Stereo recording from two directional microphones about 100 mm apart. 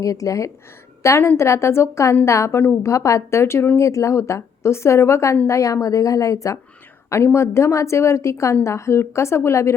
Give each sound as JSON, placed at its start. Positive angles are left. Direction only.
{"t": 0.0, "sound": "a woman's voice", "side_deg": 35}